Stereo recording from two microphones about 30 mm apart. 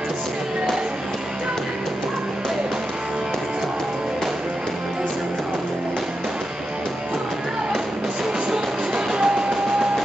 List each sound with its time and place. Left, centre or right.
8.5 s music: centre